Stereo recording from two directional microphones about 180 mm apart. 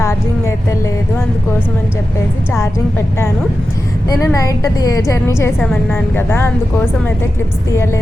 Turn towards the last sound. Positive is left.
turn(degrees=15)  # may be behind; listen again after turning